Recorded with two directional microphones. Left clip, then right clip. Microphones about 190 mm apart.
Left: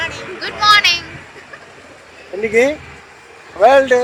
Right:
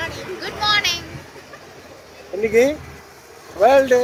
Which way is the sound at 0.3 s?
15° right (ahead or behind).